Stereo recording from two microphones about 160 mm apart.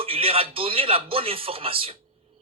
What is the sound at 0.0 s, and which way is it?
Speech, 35° right (ahead or behind).